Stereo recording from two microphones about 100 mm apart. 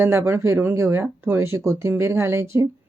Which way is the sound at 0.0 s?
25° right (ahead or behind).